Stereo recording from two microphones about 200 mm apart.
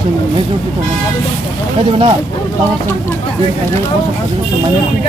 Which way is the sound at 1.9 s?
25° right (ahead or behind).